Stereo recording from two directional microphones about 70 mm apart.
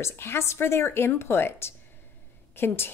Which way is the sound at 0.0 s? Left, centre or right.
Left.